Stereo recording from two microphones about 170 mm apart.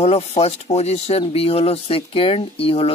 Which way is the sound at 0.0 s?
40° left (ahead or behind).